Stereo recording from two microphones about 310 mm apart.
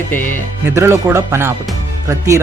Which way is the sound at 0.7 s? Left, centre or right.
Centre.